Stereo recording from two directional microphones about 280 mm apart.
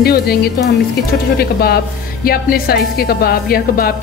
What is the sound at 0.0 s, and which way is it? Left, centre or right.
Speech, left.